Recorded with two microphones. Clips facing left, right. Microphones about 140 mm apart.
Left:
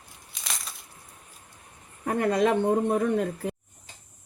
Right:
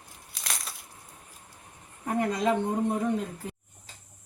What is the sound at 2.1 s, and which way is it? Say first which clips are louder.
A woman's voice: left 3 dB; 65° left (ahead or behind).